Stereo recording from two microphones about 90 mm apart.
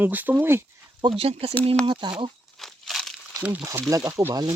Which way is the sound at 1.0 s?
55° right (ahead or behind).